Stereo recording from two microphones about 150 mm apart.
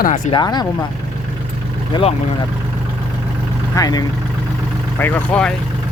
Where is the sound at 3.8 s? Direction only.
25° left (ahead or behind).